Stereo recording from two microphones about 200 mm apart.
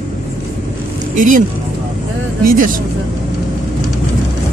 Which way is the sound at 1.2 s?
40° right (ahead or behind).